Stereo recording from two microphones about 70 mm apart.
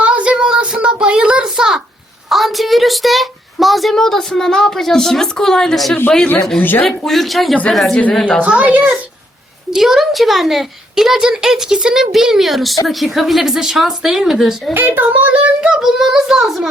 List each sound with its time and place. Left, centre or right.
0.0 s a sound: centre
6.6 s speech: left
6.8 s speech: centre
8.1 s a woman's voice: centre
8.4 s a child's voice: centre
9.7 s speech: centre
14.7 s a child's voice: right
15.6 s speech: centre